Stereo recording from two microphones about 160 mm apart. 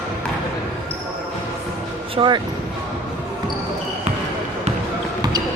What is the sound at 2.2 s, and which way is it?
Speech, 30° right (ahead or behind).